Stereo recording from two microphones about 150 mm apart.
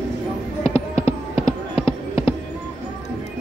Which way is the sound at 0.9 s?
45° left (ahead or behind).